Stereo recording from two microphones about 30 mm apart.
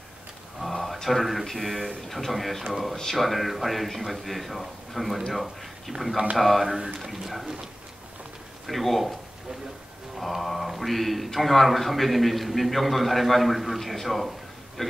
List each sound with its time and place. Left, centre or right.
0.6 s a sound: centre
1.0 s a man's voice: centre
5.9 s speech: centre
6.3 s a man's voice: centre
6.8 s speech: centre
7.1 s a man's voice: centre
8.6 s a man's voice: centre
10.1 s a man's voice: centre
13.7 s a sound: centre